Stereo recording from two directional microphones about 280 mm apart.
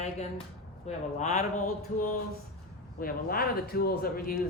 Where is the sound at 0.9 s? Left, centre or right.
Left.